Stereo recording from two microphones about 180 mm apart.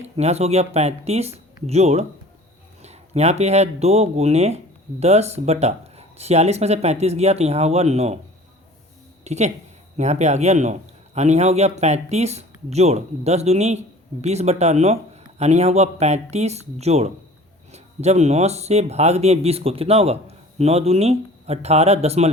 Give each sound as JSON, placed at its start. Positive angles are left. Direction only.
{"t": 0.0, "sound": "a man's voice", "side_deg": -35}
{"t": 9.2, "sound": "a man's voice", "side_deg": -40}